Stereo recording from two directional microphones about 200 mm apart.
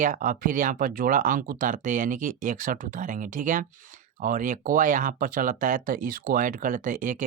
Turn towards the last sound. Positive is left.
turn(degrees=-40)  # may be behind; listen again after turning